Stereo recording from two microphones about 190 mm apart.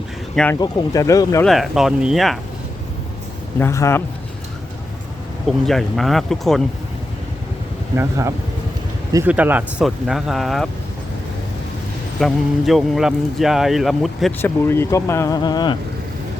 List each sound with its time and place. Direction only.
0.6 s speech: 20° left (ahead or behind)
1.5 s speech: centre (ahead or behind)
3.6 s speech: 15° left (ahead or behind)
5.5 s speech: centre (ahead or behind)
7.9 s speech: 15° right (ahead or behind); by 10.7 s centre (ahead or behind)
12.2 s speech: centre (ahead or behind)
14.4 s speech: 10° left (ahead or behind)